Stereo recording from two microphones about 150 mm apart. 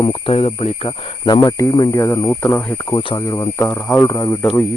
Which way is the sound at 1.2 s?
30° left (ahead or behind).